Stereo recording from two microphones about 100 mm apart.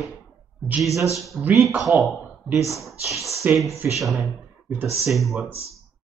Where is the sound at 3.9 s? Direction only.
Centre (ahead or behind).